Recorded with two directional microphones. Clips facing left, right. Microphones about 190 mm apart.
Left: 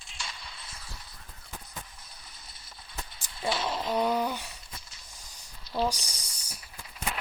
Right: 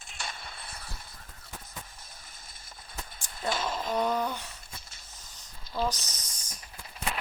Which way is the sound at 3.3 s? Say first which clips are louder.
Left 1 dB; 45° right (ahead or behind).